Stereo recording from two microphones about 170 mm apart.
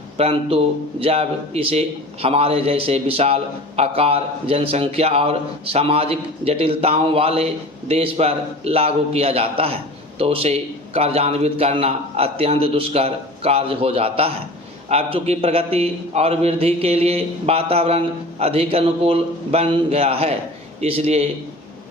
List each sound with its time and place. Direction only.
0.2 s a man's voice: 35° right (ahead or behind)